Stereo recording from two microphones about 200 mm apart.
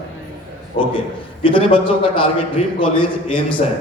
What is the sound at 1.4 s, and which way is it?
A man's voice, 25° left (ahead or behind).